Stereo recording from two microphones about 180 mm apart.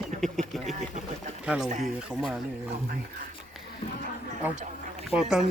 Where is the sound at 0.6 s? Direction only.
40° right (ahead or behind).